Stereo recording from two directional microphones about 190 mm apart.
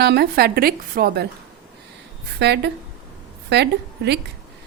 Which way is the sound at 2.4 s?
60° right (ahead or behind).